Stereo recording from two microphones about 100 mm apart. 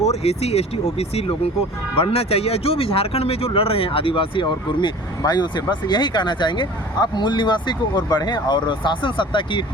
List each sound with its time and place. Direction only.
0.0 s speech: 90° left
2.0 s speech: 80° left; by 4.9 s 55° left (ahead or behind)
5.2 s speech: 45° left (ahead or behind)